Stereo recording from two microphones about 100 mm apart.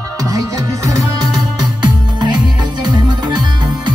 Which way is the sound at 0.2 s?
35° right (ahead or behind).